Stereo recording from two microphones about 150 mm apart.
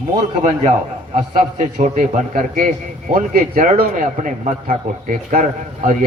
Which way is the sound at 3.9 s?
55° right (ahead or behind).